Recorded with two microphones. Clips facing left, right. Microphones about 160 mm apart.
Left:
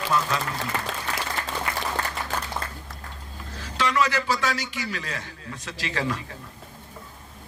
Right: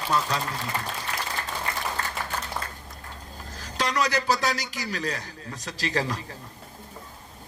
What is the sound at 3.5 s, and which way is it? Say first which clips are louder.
A man's voice: left 3 dB; 40° right (ahead or behind).